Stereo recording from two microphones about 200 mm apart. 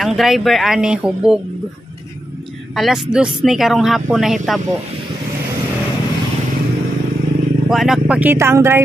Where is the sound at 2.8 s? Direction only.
Centre (ahead or behind).